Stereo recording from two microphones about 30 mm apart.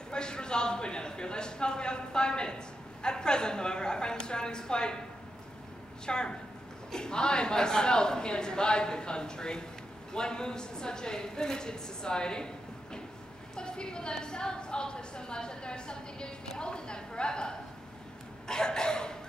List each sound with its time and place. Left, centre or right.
0.1 s speech: left
6.0 s speech: left
13.6 s a woman's voice: left
16.5 s a sound: left